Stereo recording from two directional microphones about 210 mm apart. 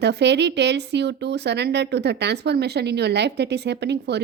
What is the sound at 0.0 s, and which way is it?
Speech, 55° right (ahead or behind).